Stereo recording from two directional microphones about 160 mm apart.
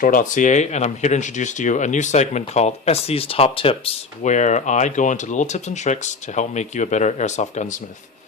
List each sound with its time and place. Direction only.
0.0 s speech: 55° left (ahead or behind); by 3.9 s 35° left (ahead or behind)
4.2 s speech: 50° left (ahead or behind)